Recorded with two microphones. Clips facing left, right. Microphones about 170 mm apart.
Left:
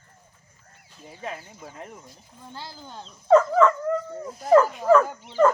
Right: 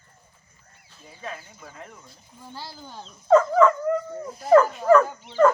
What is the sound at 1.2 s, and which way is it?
Chicken, 15° left (ahead or behind).